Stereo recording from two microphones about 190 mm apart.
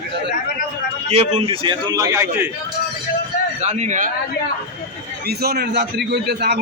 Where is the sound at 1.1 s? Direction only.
30° right (ahead or behind); by 2.5 s 15° right (ahead or behind).